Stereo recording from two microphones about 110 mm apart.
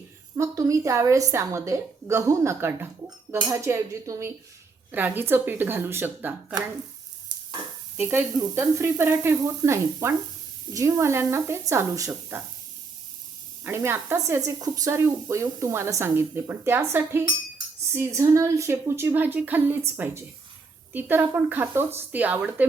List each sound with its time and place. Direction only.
0.3 s speech: 30° right (ahead or behind)
7.9 s speech: 20° right (ahead or behind)
13.7 s speech: 25° right (ahead or behind)